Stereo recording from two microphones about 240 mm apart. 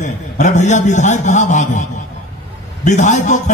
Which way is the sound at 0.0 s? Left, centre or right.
Left.